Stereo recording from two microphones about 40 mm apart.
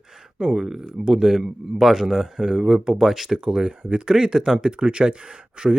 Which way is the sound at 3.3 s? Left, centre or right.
Right.